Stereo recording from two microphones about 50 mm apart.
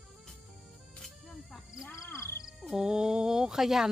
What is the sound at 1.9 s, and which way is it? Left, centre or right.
Music, left.